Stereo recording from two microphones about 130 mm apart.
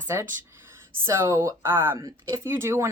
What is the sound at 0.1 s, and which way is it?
A woman's voice, 20° right (ahead or behind).